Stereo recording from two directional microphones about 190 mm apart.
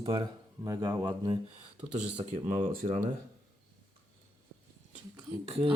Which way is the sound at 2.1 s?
30° right (ahead or behind).